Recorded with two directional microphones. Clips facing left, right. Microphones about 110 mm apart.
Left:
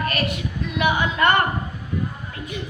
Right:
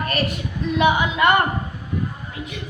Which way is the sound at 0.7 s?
20° right (ahead or behind).